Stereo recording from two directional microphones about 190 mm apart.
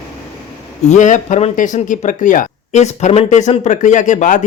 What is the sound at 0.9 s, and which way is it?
A man's voice, 40° left (ahead or behind).